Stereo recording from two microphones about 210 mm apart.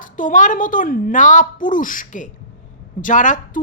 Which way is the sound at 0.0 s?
40° left (ahead or behind).